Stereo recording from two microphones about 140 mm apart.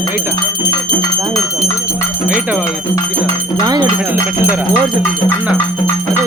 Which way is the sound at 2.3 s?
10° right (ahead or behind).